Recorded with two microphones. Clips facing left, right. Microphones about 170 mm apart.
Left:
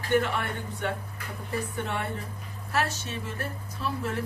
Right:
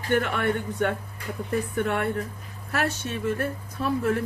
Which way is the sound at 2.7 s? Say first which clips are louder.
Right 2 dB; 55° right (ahead or behind).